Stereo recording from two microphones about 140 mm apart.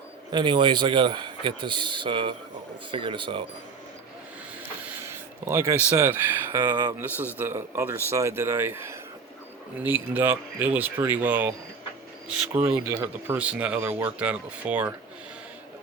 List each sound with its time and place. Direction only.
0.3 s a man's voice: 35° right (ahead or behind)
5.0 s speech: 20° right (ahead or behind)